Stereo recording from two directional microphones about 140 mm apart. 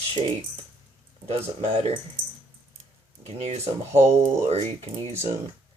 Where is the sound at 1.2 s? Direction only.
45° right (ahead or behind).